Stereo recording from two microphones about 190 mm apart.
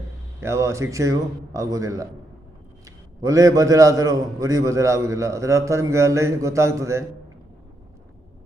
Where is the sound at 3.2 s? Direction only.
15° right (ahead or behind).